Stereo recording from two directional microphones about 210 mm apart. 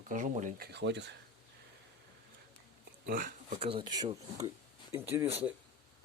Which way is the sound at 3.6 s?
25° right (ahead or behind).